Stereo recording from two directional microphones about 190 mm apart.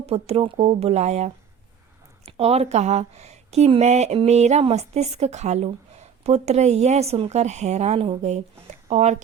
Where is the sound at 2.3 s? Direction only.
35° right (ahead or behind).